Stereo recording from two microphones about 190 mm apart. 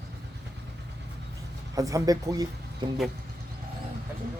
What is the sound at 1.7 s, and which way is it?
Speech, 15° right (ahead or behind).